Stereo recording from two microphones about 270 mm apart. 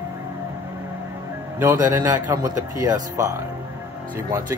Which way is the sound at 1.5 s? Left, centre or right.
Centre.